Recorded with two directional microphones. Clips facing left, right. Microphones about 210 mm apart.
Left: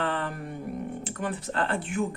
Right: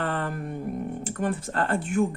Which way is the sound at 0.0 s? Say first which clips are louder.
Right 1 dB; 45° right (ahead or behind).